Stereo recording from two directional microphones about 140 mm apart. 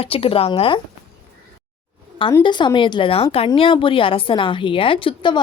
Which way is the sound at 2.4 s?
35° left (ahead or behind).